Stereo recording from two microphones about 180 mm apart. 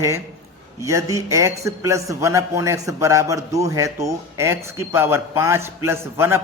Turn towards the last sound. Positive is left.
turn(degrees=-15)  # may be behind; listen again after turning